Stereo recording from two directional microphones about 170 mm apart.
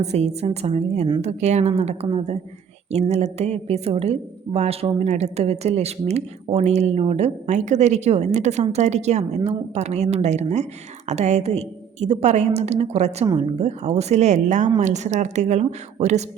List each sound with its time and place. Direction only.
0.0 s a woman's voice: 40° right (ahead or behind)